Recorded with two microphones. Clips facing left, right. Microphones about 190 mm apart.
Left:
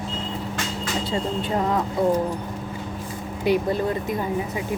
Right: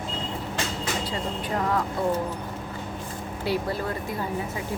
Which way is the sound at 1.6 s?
20° left (ahead or behind).